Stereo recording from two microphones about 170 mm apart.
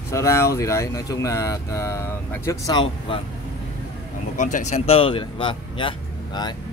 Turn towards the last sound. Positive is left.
turn(degrees=25)  # may be behind; listen again after turning